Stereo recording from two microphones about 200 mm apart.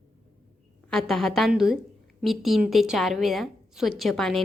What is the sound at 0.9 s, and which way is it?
A woman's voice, centre (ahead or behind).